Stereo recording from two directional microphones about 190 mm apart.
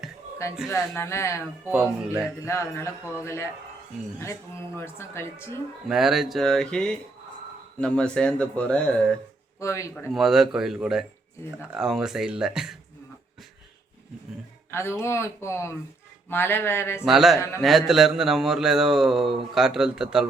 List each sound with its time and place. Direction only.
0.7 s speech: 15° left (ahead or behind)
1.7 s speech: 5° right (ahead or behind)
2.4 s speech: 15° left (ahead or behind)
5.9 s speech: centre (ahead or behind)
9.6 s speech: 15° left (ahead or behind)
10.1 s speech: centre (ahead or behind)
14.7 s speech: 15° left (ahead or behind)
17.0 s speech: centre (ahead or behind)
17.3 s speech: 15° left (ahead or behind)
17.6 s speech: centre (ahead or behind)